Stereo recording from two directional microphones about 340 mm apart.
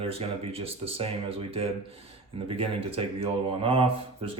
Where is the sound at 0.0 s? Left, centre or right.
Centre.